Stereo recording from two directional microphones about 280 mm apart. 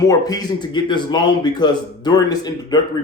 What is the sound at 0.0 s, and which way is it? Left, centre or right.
Speech, centre.